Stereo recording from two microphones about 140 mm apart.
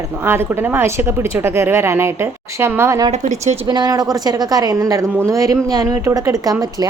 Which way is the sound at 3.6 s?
30° right (ahead or behind).